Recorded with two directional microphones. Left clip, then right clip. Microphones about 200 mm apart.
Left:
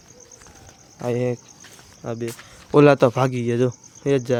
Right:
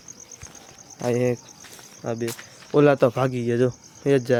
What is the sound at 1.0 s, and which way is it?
Speech, centre (ahead or behind).